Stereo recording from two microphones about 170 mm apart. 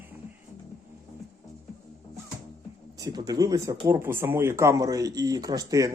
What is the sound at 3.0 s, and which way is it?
Speech, 25° right (ahead or behind).